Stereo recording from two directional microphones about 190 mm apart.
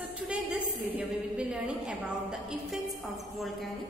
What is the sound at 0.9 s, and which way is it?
A woman's voice, 5° right (ahead or behind).